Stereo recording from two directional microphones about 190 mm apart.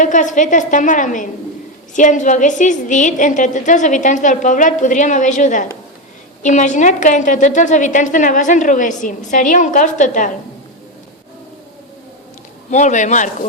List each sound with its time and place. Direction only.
0.0 s a woman's voice: 40° left (ahead or behind)
12.7 s a woman's voice: 40° left (ahead or behind)